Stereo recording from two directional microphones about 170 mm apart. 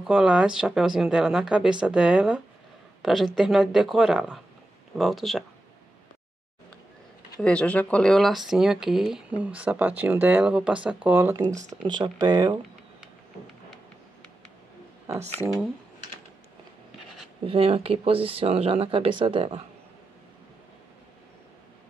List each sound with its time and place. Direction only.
0.0 s a woman's voice: 5° right (ahead or behind)
7.4 s speech: 5° left (ahead or behind); by 11.5 s 15° right (ahead or behind)
11.7 s speech: 25° right (ahead or behind)
17.5 s speech: 35° right (ahead or behind)